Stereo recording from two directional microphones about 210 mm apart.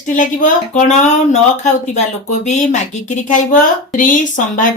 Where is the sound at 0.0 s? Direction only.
40° left (ahead or behind).